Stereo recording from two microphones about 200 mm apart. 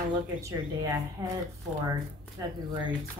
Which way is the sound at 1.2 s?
15° right (ahead or behind).